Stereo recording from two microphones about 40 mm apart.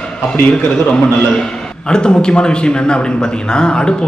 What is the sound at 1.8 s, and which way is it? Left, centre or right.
Speech, left.